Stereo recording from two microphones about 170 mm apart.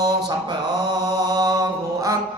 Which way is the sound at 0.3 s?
25° right (ahead or behind).